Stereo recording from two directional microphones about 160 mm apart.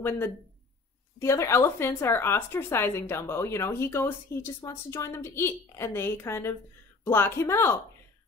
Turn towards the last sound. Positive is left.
turn(degrees=15)  # may be behind; listen again after turning